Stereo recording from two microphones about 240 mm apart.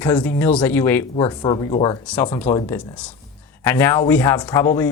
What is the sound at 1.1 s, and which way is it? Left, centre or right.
Speech, centre.